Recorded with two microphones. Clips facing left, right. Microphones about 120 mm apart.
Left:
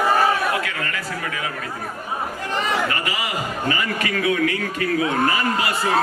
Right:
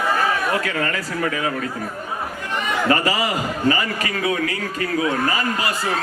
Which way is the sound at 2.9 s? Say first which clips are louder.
Right 6 dB; 35° right (ahead or behind).